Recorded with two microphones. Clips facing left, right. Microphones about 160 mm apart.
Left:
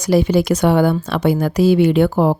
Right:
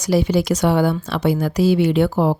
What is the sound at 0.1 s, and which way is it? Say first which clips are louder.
Speech: left 3 dB; 55° left (ahead or behind).